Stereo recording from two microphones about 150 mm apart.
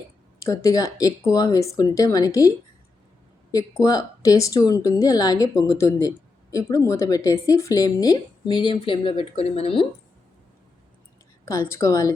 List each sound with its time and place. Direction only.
0.4 s speech: 20° left (ahead or behind)
3.5 s speech: 20° left (ahead or behind); by 9.8 s 40° left (ahead or behind)
11.4 s speech: 20° left (ahead or behind)